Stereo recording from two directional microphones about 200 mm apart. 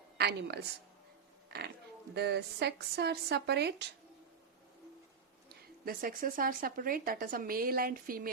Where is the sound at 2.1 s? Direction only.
55° right (ahead or behind).